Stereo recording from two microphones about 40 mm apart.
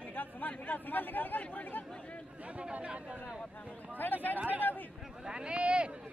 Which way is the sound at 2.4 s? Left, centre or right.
Right.